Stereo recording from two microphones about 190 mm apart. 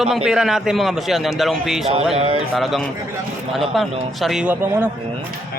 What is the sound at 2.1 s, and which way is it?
Speech, 30° right (ahead or behind).